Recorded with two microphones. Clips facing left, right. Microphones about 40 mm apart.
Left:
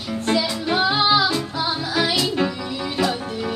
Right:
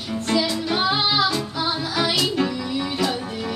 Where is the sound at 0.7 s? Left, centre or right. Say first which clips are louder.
Left 4 dB; left.